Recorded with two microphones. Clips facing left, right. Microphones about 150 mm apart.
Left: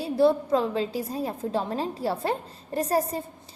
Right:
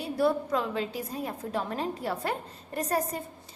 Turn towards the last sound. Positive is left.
turn(degrees=30)  # may be behind; listen again after turning